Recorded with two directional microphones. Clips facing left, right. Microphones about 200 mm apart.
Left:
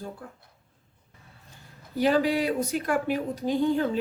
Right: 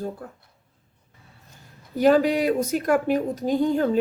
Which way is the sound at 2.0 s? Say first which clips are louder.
Right 5 dB; 45° right (ahead or behind).